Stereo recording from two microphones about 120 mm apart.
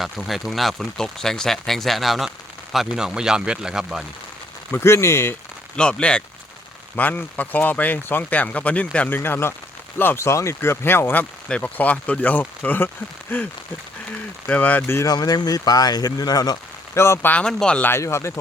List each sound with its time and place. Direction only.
0.0 s speech: centre (ahead or behind)
4.7 s speech: 20° left (ahead or behind)
5.7 s speech: 10° left (ahead or behind)
14.4 s speech: 10° left (ahead or behind)
15.1 s speech: 35° left (ahead or behind)